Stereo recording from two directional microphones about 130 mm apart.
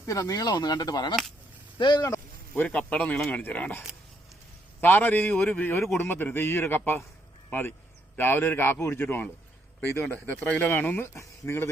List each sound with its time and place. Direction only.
0.0 s speech: 25° left (ahead or behind)
2.6 s speech: 10° left (ahead or behind)
8.1 s speech: 15° left (ahead or behind)